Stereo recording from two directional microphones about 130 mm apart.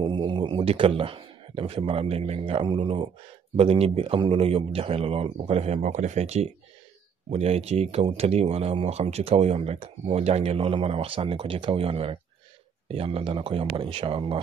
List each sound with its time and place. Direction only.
0.0 s a man's voice: 35° right (ahead or behind)